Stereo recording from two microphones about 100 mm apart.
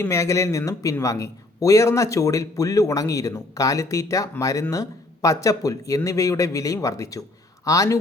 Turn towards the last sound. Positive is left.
turn(degrees=35)  # may be behind; listen again after turning